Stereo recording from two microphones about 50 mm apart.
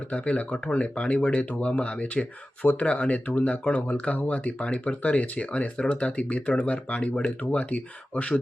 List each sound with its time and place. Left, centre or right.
0.1 s speech: left